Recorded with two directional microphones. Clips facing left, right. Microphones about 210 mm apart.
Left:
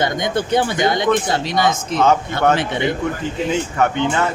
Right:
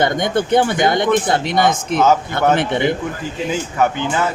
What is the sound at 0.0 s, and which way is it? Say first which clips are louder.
Speech: right 3 dB; 55° right (ahead or behind).